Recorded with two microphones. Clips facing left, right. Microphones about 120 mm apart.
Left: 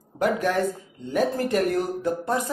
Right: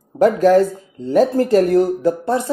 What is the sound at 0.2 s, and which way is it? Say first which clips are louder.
Speech: right 10 dB; 35° right (ahead or behind).